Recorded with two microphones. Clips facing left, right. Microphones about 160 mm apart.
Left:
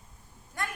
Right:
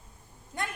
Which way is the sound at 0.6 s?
20° right (ahead or behind).